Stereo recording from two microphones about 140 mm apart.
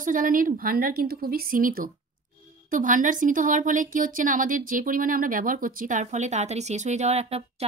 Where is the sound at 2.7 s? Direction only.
65° right (ahead or behind); by 7.6 s 45° right (ahead or behind).